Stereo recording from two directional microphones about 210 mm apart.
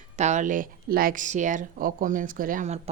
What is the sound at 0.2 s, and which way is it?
A woman's voice, 35° right (ahead or behind).